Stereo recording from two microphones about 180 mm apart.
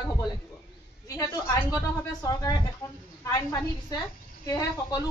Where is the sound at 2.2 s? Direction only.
20° left (ahead or behind).